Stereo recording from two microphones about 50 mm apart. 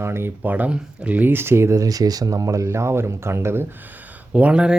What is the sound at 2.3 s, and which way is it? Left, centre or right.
Speech, right.